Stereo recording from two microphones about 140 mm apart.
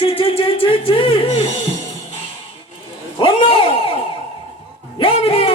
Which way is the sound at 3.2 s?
40° left (ahead or behind).